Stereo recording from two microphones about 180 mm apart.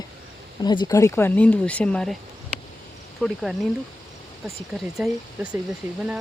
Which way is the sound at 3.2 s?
Centre (ahead or behind).